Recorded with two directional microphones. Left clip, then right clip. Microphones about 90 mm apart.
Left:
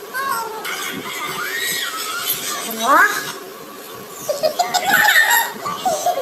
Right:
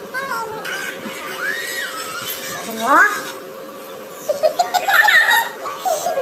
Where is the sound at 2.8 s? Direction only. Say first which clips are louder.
Even; 15° right (ahead or behind).